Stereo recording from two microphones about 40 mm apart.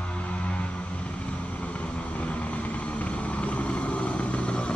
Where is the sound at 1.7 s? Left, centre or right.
Left.